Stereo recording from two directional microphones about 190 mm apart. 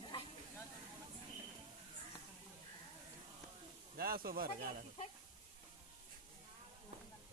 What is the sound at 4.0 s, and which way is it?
Snake, 50° right (ahead or behind).